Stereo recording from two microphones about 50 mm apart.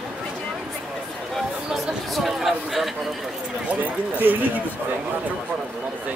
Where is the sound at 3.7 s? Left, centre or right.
Right.